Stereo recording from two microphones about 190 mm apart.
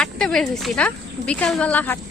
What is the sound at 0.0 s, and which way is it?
Speech, 5° left (ahead or behind).